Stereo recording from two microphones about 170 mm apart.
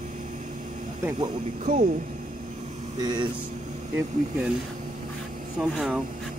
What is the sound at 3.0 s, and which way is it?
Speech, 25° right (ahead or behind).